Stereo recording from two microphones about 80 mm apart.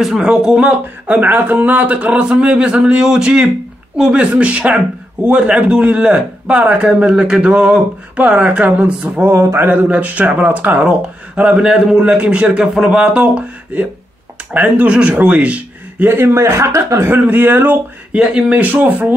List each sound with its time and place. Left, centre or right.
0.0 s speech: centre
9.2 s a sound: right
9.8 s a man's voice: centre
18.1 s a man's voice: centre